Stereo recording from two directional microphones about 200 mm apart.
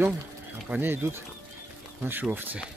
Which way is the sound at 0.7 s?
10° right (ahead or behind).